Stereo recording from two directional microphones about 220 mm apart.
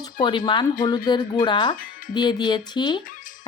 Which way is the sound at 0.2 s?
20° left (ahead or behind).